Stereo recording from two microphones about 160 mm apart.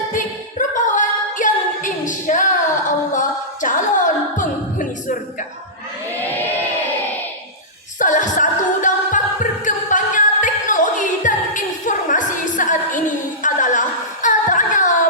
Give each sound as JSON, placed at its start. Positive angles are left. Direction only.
{"t": 0.7, "sound": "singing", "side_deg": 55}
{"t": 3.1, "sound": "music", "side_deg": 55}
{"t": 7.9, "sound": "music", "side_deg": 55}
{"t": 13.4, "sound": "a sound", "side_deg": 55}